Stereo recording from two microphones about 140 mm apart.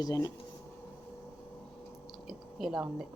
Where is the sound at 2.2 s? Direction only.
Centre (ahead or behind).